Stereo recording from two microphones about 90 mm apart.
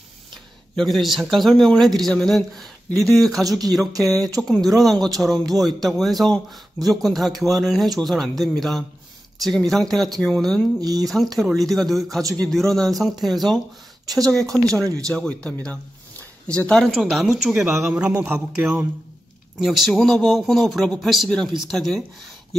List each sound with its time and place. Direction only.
0.7 s speech: centre (ahead or behind)
10.8 s speech: 45° right (ahead or behind)
11.3 s speech: centre (ahead or behind)
14.0 s speech: 40° right (ahead or behind)
15.0 s a man's voice: 10° left (ahead or behind)